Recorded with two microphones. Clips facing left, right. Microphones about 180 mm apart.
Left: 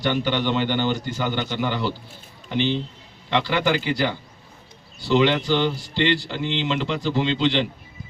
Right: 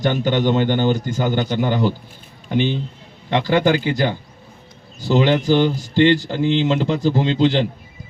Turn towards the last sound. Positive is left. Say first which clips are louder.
# right 4 dB
turn(degrees=-45)  # may be behind; listen again after turning